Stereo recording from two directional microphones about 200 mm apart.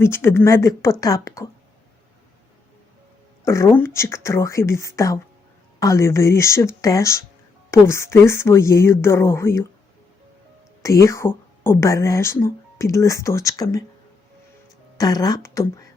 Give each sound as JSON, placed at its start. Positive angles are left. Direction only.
{"t": 0.0, "sound": "speech", "side_deg": 10}
{"t": 3.4, "sound": "speech", "side_deg": 15}
{"t": 10.8, "sound": "speech", "side_deg": 15}
{"t": 14.9, "sound": "speech", "side_deg": 20}